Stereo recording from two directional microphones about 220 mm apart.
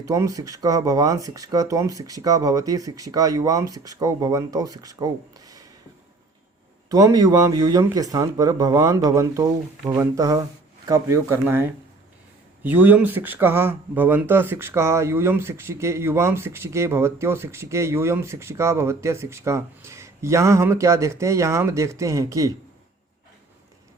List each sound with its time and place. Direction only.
0.0 s speech: 15° right (ahead or behind)
6.8 s speech: 15° right (ahead or behind)